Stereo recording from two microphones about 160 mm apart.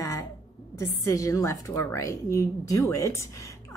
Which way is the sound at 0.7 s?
20° left (ahead or behind).